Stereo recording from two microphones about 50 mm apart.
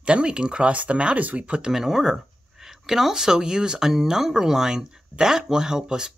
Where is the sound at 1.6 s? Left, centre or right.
Centre.